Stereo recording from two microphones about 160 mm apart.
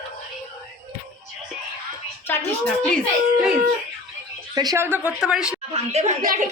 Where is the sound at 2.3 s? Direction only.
15° left (ahead or behind).